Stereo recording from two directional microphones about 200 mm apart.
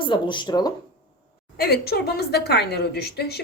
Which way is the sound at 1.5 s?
50° left (ahead or behind).